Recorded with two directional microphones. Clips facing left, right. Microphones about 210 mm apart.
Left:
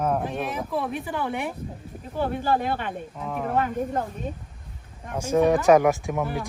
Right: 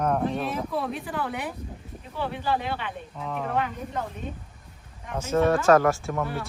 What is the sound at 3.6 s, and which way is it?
Speech, 45° left (ahead or behind).